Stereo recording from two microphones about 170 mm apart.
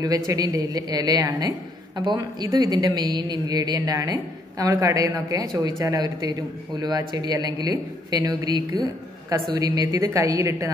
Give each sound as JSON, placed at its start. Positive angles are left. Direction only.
{"t": 0.0, "sound": "a woman's voice", "side_deg": -20}